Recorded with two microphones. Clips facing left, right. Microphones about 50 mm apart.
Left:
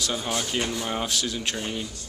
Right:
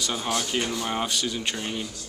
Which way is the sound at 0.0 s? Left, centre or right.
Centre.